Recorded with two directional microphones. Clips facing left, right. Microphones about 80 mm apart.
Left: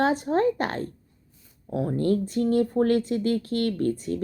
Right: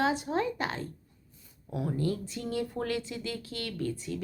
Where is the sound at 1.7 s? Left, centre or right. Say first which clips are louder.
Left 7 dB; left.